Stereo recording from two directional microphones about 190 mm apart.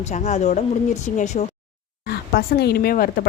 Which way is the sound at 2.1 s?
55° left (ahead or behind).